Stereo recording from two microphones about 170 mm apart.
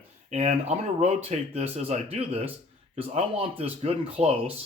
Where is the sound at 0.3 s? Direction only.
40° right (ahead or behind).